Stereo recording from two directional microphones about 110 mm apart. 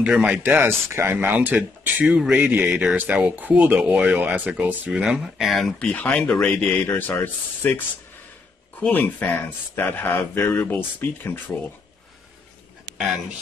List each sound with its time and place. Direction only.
0.0 s speech: 10° right (ahead or behind); by 11.7 s 20° left (ahead or behind)